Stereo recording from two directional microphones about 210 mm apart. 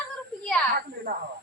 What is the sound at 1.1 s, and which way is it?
Snake, 45° right (ahead or behind).